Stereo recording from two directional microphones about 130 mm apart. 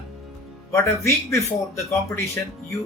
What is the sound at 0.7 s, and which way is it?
Speech, 20° left (ahead or behind).